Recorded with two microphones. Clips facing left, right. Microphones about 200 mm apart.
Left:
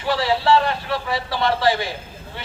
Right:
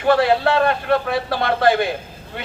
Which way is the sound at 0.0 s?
55° right (ahead or behind).